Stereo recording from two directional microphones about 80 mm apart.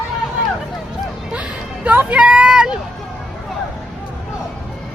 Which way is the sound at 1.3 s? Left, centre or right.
Centre.